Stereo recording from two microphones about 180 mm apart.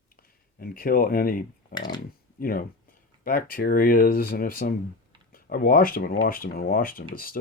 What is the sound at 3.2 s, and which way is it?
Speech, 55° left (ahead or behind).